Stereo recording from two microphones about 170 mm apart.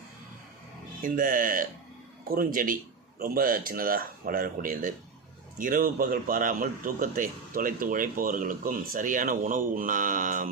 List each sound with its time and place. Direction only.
1.0 s a man's voice: 55° right (ahead or behind)